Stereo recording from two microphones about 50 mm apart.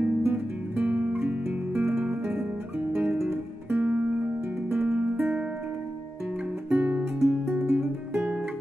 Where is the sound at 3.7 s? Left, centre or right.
Right; by 8.0 s centre.